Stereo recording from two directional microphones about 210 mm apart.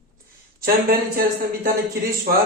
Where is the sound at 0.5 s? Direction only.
45° right (ahead or behind).